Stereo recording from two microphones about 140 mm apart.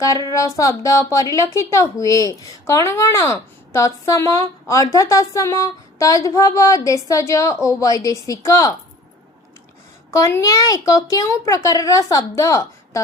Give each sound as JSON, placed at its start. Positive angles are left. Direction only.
{"t": 0.3, "sound": "speech", "side_deg": 20}
{"t": 10.1, "sound": "speech", "side_deg": 20}